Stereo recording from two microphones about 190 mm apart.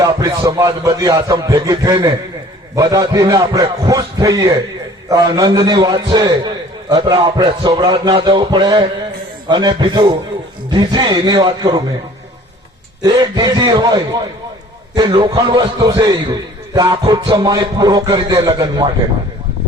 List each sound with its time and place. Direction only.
0.0 s a man's voice: 15° right (ahead or behind)
13.0 s a man's voice: 20° right (ahead or behind)